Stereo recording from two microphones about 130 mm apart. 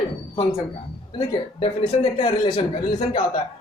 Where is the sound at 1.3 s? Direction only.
45° left (ahead or behind).